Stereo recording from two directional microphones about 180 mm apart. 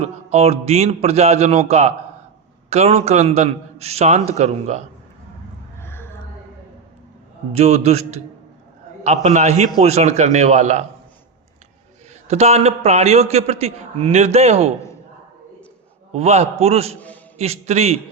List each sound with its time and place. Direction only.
0.0 s a man's voice: 35° right (ahead or behind)
5.8 s a sound: 10° left (ahead or behind)
7.5 s a man's voice: 35° right (ahead or behind)
12.3 s a man's voice: 35° right (ahead or behind)
16.1 s a man's voice: 35° right (ahead or behind)